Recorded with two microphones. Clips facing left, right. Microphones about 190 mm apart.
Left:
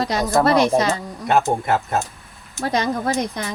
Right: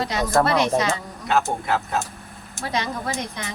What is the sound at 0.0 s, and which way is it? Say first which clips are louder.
Speech: left 2 dB; 40° left (ahead or behind).